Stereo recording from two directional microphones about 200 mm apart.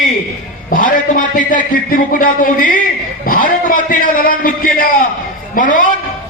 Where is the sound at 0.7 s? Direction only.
40° left (ahead or behind).